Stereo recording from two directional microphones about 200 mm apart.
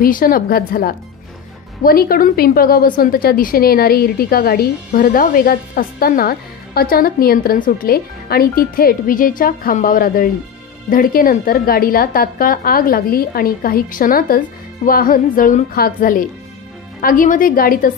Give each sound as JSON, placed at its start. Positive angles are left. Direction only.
{"t": 0.0, "sound": "a woman's voice", "side_deg": 45}